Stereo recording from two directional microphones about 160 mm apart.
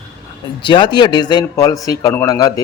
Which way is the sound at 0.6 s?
30° left (ahead or behind).